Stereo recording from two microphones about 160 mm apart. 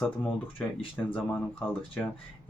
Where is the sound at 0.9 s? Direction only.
10° left (ahead or behind).